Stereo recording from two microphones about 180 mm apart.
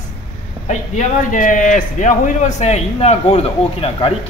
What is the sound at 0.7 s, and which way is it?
A man's voice, 40° left (ahead or behind).